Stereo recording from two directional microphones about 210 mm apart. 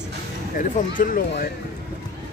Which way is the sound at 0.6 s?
40° left (ahead or behind).